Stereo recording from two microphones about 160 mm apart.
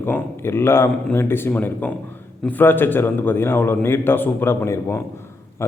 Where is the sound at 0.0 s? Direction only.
15° left (ahead or behind).